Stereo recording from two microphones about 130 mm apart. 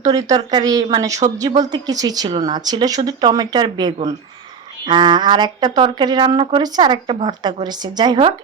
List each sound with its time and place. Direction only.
0.0 s speech: 30° right (ahead or behind)